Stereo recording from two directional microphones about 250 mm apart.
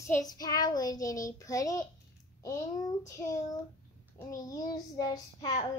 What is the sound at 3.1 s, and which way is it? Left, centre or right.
A woman's voice, centre.